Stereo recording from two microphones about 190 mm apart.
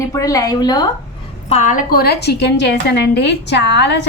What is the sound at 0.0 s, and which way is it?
Speech, 15° left (ahead or behind).